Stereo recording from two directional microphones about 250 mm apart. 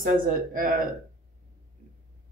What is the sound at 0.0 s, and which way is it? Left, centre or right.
Speech, right.